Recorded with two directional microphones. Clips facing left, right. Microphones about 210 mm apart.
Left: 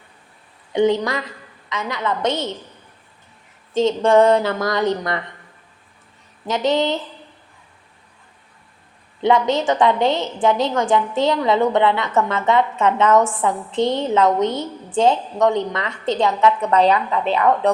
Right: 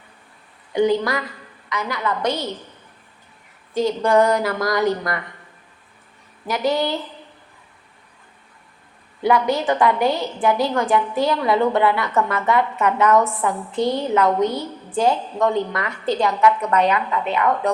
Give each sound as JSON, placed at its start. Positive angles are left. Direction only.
{"t": 0.7, "sound": "a woman's voice", "side_deg": 25}
{"t": 3.8, "sound": "a woman's voice", "side_deg": 25}
{"t": 6.5, "sound": "a woman's voice", "side_deg": 20}
{"t": 9.2, "sound": "a woman's voice", "side_deg": 20}